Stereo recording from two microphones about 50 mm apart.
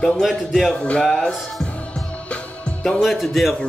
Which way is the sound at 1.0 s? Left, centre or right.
Centre.